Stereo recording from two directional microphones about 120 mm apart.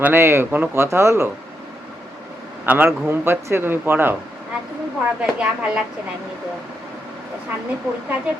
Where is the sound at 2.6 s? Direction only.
10° right (ahead or behind).